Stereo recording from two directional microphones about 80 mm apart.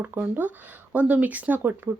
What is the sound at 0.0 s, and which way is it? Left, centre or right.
Speech, right.